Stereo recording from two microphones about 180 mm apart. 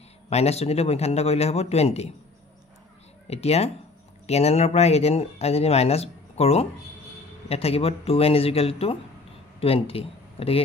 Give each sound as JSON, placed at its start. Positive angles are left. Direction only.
{"t": 0.3, "sound": "speech", "side_deg": 35}
{"t": 3.3, "sound": "speech", "side_deg": 35}